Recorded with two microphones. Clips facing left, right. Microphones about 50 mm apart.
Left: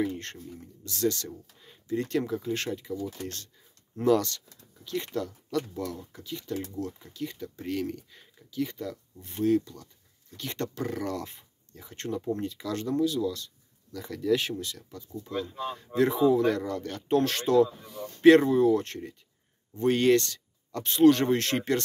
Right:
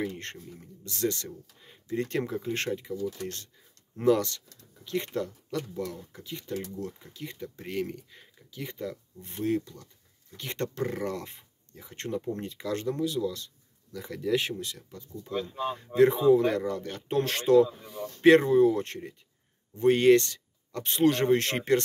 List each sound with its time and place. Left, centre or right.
0.8 s speech: right
1.9 s speech: right
3.9 s speech: right